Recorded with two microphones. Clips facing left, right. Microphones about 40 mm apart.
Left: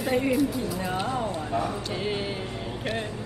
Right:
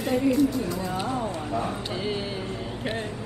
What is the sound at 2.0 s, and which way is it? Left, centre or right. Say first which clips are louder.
Music: even; left.